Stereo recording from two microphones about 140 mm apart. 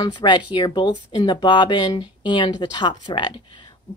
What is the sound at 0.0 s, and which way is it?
Speech, 35° left (ahead or behind).